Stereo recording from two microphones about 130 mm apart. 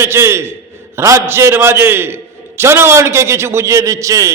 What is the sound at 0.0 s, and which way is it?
A man's voice, 20° right (ahead or behind).